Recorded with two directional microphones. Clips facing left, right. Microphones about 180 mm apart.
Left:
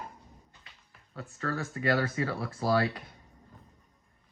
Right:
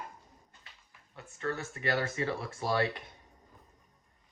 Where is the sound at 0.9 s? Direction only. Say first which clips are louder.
Left 8 dB; 20° right (ahead or behind).